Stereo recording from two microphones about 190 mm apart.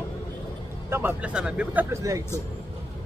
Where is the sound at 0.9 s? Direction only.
10° right (ahead or behind).